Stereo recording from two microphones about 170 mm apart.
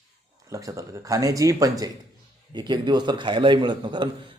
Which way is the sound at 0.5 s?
20° right (ahead or behind).